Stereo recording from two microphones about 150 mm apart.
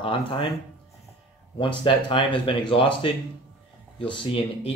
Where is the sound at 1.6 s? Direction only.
35° left (ahead or behind).